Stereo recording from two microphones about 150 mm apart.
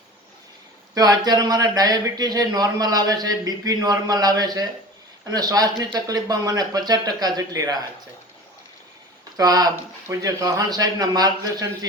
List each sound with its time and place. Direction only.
0.9 s speech: 25° right (ahead or behind)
9.4 s speech: 25° right (ahead or behind)